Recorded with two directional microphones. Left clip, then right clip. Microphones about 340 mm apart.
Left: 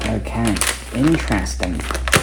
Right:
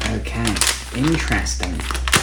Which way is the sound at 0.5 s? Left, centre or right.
Centre.